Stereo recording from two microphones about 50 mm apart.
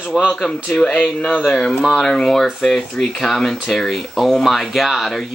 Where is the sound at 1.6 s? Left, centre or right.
Centre.